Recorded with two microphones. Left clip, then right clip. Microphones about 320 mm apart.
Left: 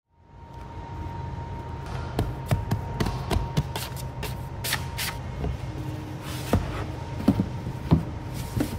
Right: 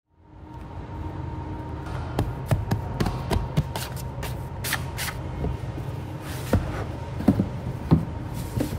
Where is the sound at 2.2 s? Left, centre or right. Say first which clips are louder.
Right 1 dB; centre.